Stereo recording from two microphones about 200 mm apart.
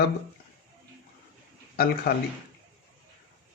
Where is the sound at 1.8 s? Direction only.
50° left (ahead or behind).